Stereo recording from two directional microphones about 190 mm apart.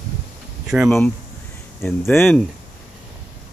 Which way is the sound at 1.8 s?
10° left (ahead or behind).